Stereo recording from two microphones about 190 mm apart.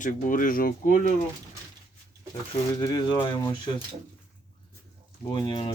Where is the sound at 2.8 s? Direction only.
25° left (ahead or behind).